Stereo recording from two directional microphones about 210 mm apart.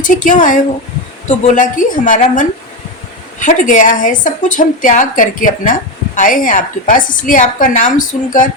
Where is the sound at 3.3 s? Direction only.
40° left (ahead or behind).